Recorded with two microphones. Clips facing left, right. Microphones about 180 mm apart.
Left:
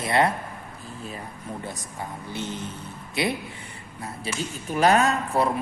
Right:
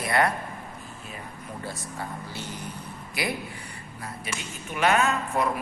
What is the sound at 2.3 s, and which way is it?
Speech, 20° left (ahead or behind).